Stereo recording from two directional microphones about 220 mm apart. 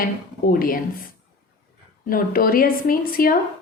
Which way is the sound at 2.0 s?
40° left (ahead or behind).